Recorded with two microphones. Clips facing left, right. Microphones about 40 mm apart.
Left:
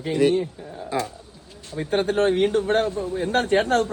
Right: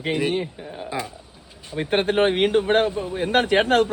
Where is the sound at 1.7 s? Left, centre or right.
Right.